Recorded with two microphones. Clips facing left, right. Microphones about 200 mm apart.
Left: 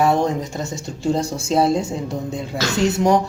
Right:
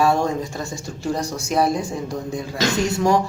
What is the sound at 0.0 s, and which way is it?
Speech, 20° left (ahead or behind).